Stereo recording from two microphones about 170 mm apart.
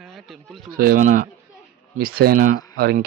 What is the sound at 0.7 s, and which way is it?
Speech, 60° right (ahead or behind).